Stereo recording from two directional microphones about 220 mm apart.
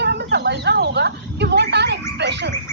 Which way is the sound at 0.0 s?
50° right (ahead or behind).